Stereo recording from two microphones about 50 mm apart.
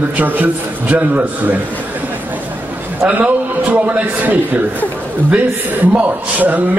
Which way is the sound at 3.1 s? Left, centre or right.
Right.